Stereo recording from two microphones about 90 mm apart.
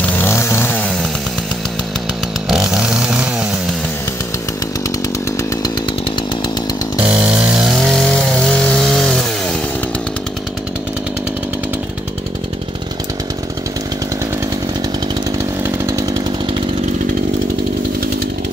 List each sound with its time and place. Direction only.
0.0 s chainsaw: 20° left (ahead or behind)
2.4 s chainsaw: 5° right (ahead or behind)
7.1 s chainsaw: 15° right (ahead or behind); by 9.2 s 5° left (ahead or behind)
15.6 s chainsaw: 40° right (ahead or behind)